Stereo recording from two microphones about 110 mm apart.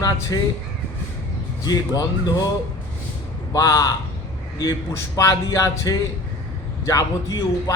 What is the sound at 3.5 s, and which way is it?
Speech, 30° left (ahead or behind).